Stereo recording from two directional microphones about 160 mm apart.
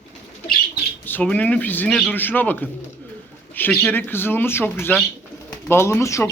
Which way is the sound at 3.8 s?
10° left (ahead or behind).